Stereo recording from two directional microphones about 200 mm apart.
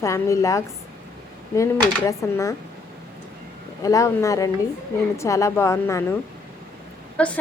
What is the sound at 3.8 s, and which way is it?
A woman's voice, 15° left (ahead or behind).